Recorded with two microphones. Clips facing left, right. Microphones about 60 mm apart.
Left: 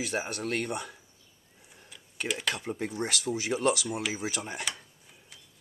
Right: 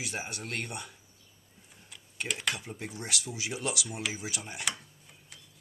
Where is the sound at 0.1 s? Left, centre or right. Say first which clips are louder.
Left 6 dB; left.